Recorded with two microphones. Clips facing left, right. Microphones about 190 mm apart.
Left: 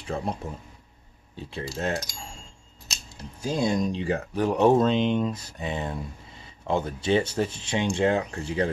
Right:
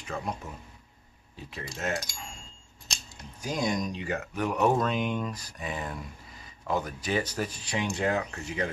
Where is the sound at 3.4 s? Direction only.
30° left (ahead or behind).